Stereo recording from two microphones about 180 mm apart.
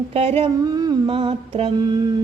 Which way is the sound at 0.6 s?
20° right (ahead or behind).